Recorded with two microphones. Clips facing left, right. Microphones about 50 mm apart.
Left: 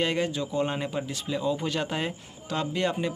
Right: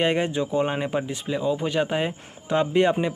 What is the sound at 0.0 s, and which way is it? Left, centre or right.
A man's voice, right.